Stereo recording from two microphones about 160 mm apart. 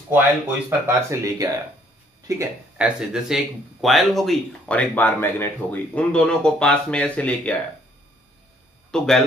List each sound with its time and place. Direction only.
0.7 s speech: 15° right (ahead or behind)
2.8 s speech: 5° right (ahead or behind)
8.9 s speech: 5° left (ahead or behind)